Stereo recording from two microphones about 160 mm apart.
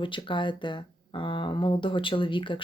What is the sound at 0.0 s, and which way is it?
Speech, 30° left (ahead or behind).